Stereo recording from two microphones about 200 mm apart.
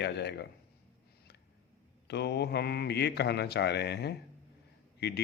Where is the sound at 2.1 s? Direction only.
55° left (ahead or behind).